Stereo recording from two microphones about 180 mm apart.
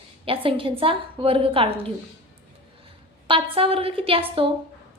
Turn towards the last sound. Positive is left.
turn(degrees=-30)  # may be behind; listen again after turning